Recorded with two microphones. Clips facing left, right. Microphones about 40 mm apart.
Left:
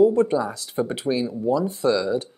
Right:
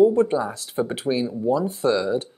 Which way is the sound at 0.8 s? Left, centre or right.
Centre.